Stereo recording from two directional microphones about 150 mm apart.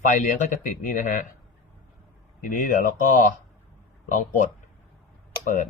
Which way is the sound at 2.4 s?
60° left (ahead or behind).